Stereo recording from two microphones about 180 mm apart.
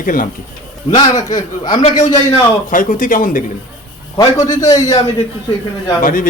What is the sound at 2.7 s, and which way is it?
Speech, 45° left (ahead or behind).